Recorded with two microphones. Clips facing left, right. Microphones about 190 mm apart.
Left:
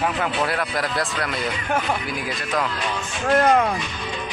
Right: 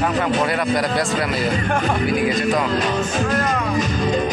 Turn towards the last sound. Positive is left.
turn(degrees=-45)  # may be behind; listen again after turning